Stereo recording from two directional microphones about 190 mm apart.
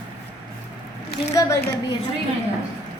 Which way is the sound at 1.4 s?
15° left (ahead or behind).